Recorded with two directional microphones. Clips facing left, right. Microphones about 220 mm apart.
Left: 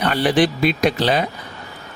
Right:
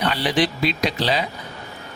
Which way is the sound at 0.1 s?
50° left (ahead or behind).